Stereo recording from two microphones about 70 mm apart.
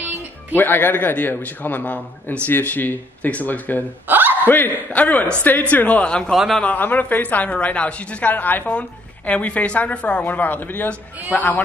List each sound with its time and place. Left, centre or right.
0.6 s a woman's voice: left
6.3 s a man's voice: centre
6.6 s a woman's voice: left